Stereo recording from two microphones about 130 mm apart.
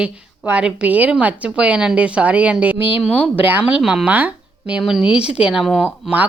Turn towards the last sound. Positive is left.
turn(degrees=0)  # may be behind; listen again after turning